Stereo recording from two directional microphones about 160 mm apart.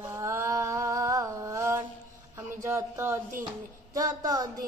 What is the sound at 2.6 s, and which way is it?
Speech, 15° right (ahead or behind).